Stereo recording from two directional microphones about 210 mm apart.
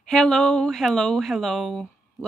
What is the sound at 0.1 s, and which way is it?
Speech, 5° left (ahead or behind).